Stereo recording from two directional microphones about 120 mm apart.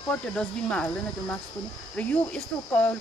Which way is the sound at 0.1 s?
10° left (ahead or behind).